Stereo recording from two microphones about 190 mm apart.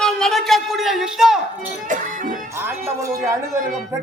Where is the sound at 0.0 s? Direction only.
Centre (ahead or behind).